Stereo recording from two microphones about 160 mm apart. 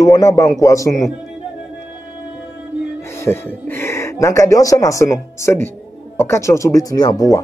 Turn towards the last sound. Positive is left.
turn(degrees=25)  # may be behind; listen again after turning